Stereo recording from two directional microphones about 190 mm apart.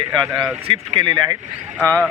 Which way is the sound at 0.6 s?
25° right (ahead or behind).